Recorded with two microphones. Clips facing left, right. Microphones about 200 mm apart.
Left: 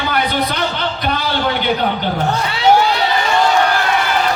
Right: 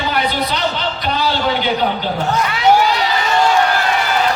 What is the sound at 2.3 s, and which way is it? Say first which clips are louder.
Speech: right 1 dB; 30° left (ahead or behind).